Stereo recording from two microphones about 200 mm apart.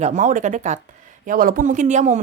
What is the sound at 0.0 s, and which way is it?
A woman's voice, 40° right (ahead or behind).